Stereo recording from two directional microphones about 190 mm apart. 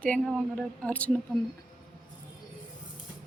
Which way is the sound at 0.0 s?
5° left (ahead or behind).